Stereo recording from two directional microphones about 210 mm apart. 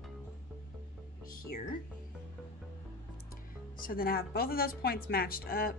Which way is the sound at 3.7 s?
45° left (ahead or behind).